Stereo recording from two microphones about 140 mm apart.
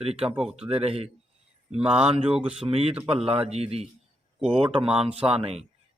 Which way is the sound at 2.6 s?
45° right (ahead or behind).